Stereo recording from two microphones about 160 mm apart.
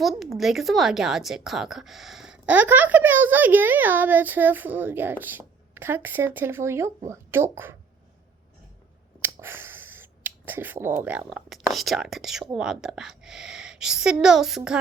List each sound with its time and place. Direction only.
0.0 s a woman's voice: centre (ahead or behind)
9.2 s finger snapping: 15° right (ahead or behind)
11.3 s a woman's voice: centre (ahead or behind)